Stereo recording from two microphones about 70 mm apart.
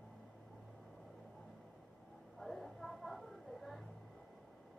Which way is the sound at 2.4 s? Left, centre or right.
Centre.